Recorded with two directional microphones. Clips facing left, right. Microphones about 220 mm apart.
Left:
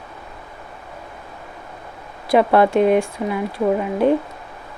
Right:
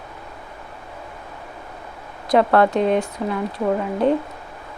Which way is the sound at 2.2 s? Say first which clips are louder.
Left 1 dB; 15° left (ahead or behind).